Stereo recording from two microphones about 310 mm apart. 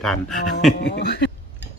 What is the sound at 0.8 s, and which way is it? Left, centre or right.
Speech, left.